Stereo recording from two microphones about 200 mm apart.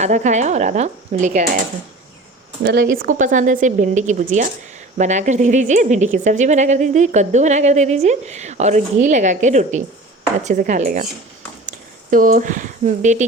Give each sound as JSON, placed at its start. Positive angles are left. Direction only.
{"t": 0.0, "sound": "speech", "side_deg": -35}
{"t": 2.9, "sound": "speech", "side_deg": -45}
{"t": 12.1, "sound": "speech", "side_deg": -40}